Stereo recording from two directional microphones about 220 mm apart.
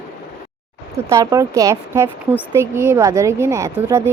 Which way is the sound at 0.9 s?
15° right (ahead or behind).